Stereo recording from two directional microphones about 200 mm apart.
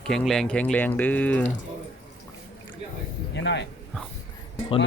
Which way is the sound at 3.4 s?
60° left (ahead or behind).